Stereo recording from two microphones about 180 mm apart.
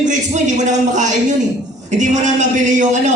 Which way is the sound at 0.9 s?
40° right (ahead or behind).